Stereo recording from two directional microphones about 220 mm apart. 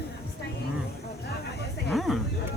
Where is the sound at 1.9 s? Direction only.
Centre (ahead or behind).